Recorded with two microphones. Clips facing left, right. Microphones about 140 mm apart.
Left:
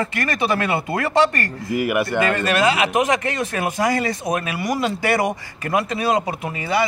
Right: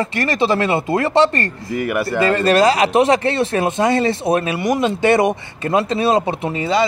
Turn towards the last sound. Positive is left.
turn(degrees=-30)  # may be behind; listen again after turning